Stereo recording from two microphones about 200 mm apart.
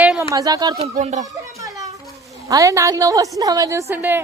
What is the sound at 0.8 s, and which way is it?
Speech, 35° right (ahead or behind).